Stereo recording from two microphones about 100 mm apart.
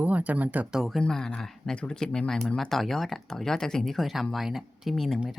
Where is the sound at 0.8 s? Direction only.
Centre (ahead or behind).